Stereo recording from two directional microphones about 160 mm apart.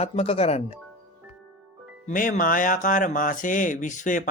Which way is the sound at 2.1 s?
55° left (ahead or behind).